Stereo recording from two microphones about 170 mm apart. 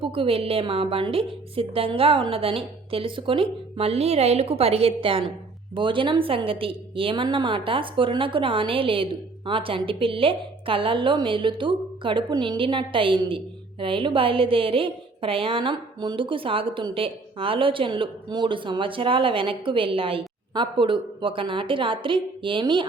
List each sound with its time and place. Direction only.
0.0 s a woman's voice: 30° right (ahead or behind)